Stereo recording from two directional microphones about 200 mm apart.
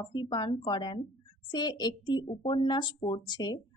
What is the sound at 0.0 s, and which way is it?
A woman's voice, 20° left (ahead or behind).